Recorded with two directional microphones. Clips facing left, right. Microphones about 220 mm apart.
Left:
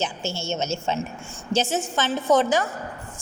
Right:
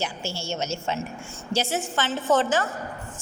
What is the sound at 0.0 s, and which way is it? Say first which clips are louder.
A woman's voice: left 3 dB; 25° left (ahead or behind).